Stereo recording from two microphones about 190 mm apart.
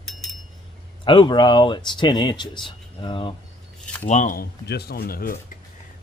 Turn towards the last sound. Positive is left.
turn(degrees=50)  # may be behind; listen again after turning